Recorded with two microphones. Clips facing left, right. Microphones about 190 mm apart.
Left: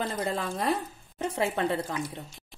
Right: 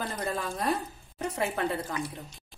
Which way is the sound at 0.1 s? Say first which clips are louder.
Left 2 dB; 25° left (ahead or behind).